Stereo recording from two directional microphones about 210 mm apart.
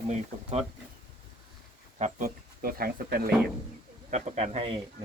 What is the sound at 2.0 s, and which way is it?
Speech, 40° right (ahead or behind).